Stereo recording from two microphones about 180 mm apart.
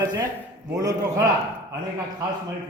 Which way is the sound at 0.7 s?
20° right (ahead or behind).